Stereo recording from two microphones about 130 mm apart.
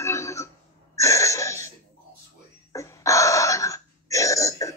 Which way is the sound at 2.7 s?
25° left (ahead or behind).